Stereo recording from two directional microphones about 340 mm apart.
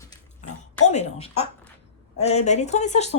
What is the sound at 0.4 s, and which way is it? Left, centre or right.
Oink, left.